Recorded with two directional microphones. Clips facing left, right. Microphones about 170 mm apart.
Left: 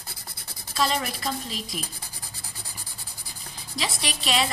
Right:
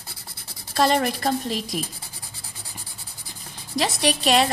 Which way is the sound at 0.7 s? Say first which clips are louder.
Right 6 dB; 55° right (ahead or behind).